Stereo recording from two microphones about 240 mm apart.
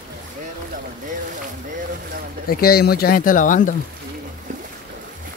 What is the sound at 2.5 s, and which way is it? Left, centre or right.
Speech, left.